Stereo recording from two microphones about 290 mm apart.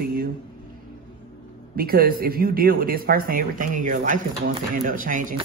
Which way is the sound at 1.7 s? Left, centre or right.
Right.